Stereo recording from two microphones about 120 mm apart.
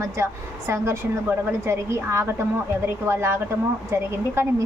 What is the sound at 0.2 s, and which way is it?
A woman's voice, 25° right (ahead or behind).